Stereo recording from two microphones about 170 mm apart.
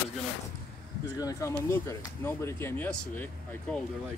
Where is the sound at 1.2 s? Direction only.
20° left (ahead or behind).